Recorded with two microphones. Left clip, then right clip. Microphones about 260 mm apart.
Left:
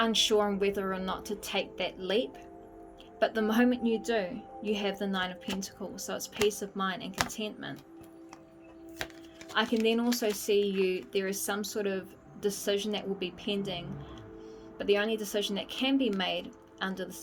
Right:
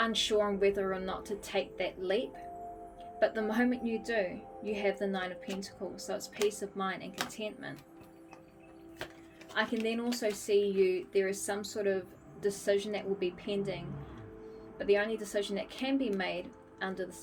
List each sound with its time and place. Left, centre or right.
0.0 s speech: left
9.8 s a woman's voice: left